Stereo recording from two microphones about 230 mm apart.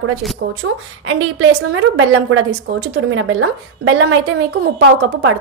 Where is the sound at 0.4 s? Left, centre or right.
Right.